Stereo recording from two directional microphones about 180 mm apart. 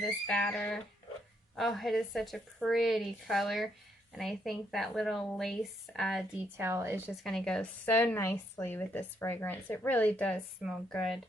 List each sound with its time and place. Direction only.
0.0 s speech: 5° left (ahead or behind)
6.6 s a woman's voice: 15° right (ahead or behind)
7.3 s speech: 5° left (ahead or behind)